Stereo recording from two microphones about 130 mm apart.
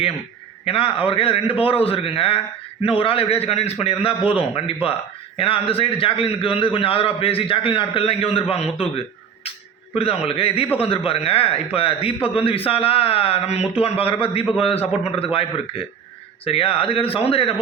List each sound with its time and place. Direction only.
0.6 s a man's voice: 45° left (ahead or behind)
8.8 s a sound: 50° left (ahead or behind)
9.9 s a man's voice: 45° left (ahead or behind)